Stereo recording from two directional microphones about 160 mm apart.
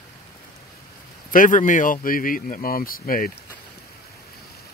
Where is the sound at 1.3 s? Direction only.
55° left (ahead or behind).